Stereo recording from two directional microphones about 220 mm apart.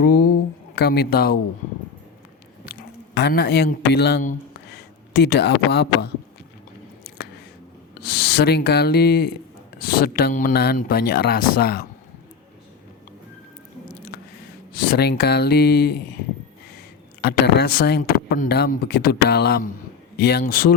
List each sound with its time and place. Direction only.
0.8 s speech: 45° left (ahead or behind)
3.2 s a man's voice: 50° left (ahead or behind)
8.0 s speech: 45° left (ahead or behind)
14.8 s speech: 45° left (ahead or behind)
17.2 s speech: 45° left (ahead or behind)